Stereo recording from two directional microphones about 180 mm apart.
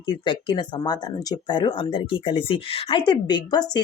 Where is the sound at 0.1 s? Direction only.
25° left (ahead or behind).